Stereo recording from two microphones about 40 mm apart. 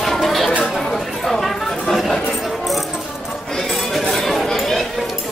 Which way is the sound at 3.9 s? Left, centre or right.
Centre.